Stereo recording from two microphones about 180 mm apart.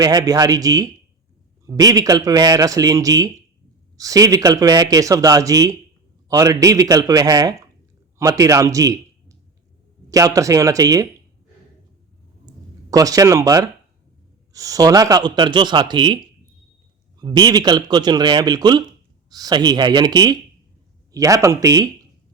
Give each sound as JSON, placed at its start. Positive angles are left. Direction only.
{"t": 0.0, "sound": "a man's voice", "side_deg": -20}
{"t": 12.9, "sound": "speech", "side_deg": -20}